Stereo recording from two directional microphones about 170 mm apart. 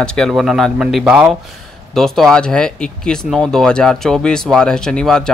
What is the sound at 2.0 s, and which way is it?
Speech, centre (ahead or behind).